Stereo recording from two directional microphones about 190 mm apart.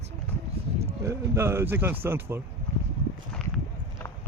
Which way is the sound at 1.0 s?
15° right (ahead or behind).